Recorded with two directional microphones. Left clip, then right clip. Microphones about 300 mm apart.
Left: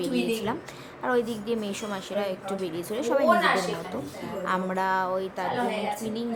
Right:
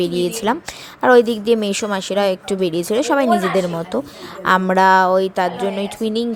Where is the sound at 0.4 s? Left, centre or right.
Right.